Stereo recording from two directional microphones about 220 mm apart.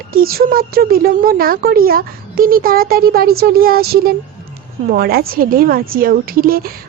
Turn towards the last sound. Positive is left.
turn(degrees=-40)  # may be behind; listen again after turning